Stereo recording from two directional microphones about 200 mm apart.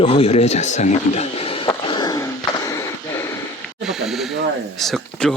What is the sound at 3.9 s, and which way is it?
Snake, centre (ahead or behind).